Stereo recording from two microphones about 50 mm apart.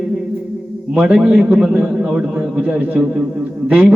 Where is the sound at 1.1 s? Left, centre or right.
Centre.